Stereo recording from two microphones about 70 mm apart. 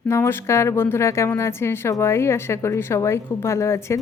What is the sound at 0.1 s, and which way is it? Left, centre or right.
A woman's voice, left.